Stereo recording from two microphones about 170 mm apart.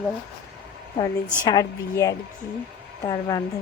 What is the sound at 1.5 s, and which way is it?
Speech, 20° left (ahead or behind).